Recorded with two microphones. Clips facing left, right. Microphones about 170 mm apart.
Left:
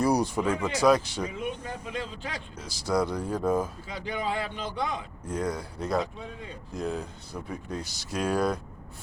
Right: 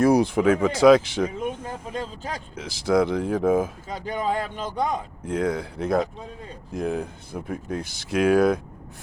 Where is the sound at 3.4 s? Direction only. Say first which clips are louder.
Right 4 dB; 50° right (ahead or behind).